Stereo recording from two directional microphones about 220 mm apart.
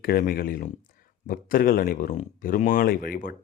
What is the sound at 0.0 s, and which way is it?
Speech, 40° left (ahead or behind).